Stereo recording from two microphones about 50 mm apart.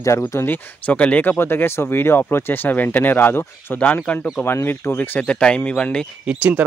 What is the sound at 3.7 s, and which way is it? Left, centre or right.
Speech, left.